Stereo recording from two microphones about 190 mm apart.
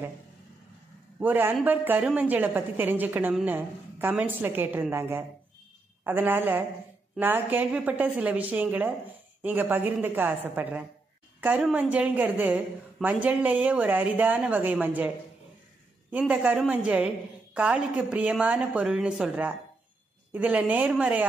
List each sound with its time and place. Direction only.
1.2 s a woman's voice: 10° right (ahead or behind)